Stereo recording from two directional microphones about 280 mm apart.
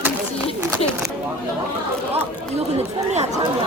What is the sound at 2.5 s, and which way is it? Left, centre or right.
Speech, right.